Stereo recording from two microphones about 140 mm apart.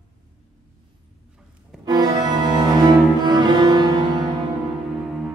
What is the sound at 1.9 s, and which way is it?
Organ, 30° right (ahead or behind).